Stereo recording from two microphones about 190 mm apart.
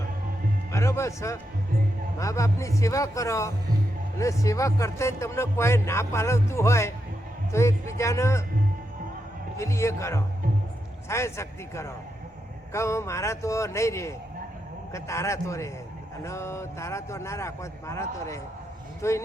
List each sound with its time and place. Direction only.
0.7 s speech: 15° left (ahead or behind)
9.6 s speech: 15° left (ahead or behind)